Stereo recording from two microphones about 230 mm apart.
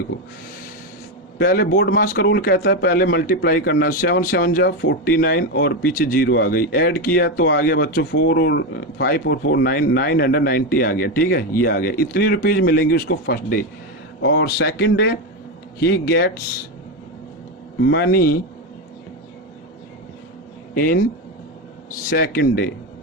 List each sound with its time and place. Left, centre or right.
1.4 s speech: left
17.8 s speech: left
20.7 s speech: left
22.1 s speech: left